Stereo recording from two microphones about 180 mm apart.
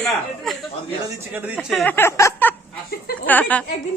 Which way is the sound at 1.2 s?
10° right (ahead or behind).